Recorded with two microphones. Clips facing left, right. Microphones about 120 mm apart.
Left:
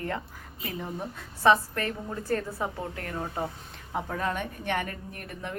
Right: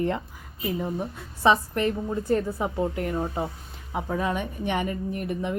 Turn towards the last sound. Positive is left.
turn(degrees=-15)  # may be behind; listen again after turning